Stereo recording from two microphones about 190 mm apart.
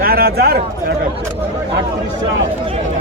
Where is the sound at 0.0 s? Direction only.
55° right (ahead or behind).